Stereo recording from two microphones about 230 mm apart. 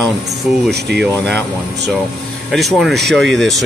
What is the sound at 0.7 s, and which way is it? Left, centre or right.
Speech, right.